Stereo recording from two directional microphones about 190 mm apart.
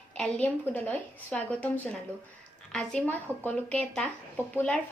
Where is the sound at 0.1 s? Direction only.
5° left (ahead or behind).